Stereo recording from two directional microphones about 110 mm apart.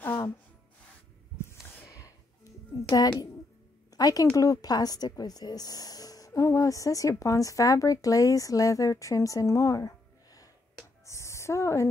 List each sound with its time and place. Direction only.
0.0 s music: 20° left (ahead or behind)
1.9 s music: 30° left (ahead or behind)
2.9 s a woman's voice: 40° left (ahead or behind)
11.1 s a sound: 25° left (ahead or behind)